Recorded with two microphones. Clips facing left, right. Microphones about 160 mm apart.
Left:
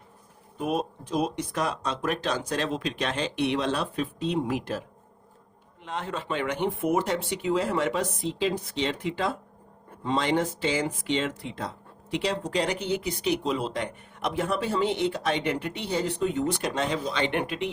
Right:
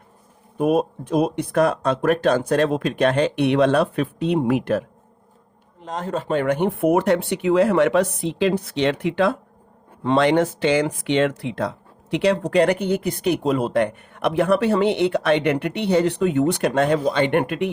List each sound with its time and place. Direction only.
0.6 s speech: 55° right (ahead or behind)
5.8 s speech: 40° right (ahead or behind)